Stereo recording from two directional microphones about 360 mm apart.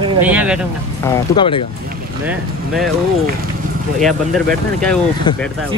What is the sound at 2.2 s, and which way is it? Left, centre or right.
Speech, centre.